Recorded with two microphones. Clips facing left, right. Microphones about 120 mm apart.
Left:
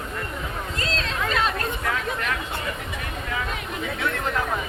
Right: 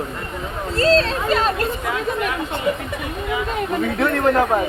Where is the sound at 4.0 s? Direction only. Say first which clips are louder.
Right 10 dB; 55° right (ahead or behind).